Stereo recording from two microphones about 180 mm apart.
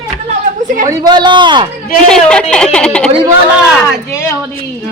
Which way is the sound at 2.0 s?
5° left (ahead or behind).